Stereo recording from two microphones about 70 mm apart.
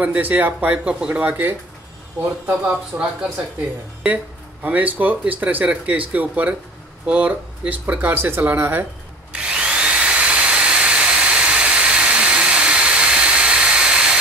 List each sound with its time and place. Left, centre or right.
0.0 s speech: right
2.6 s speech: centre
4.6 s speech: right
9.3 s drill: centre